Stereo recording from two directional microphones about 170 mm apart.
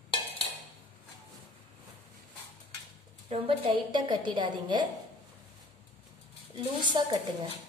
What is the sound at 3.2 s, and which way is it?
A woman's voice, 30° right (ahead or behind).